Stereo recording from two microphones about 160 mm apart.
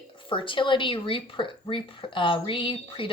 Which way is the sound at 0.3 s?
30° left (ahead or behind).